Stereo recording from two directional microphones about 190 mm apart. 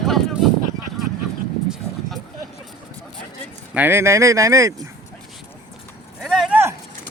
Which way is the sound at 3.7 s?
10° right (ahead or behind).